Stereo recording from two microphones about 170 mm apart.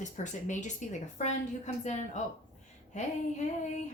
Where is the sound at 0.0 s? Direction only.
45° left (ahead or behind).